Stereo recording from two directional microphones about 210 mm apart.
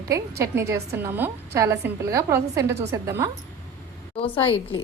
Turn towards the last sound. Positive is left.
turn(degrees=25)  # may be behind; listen again after turning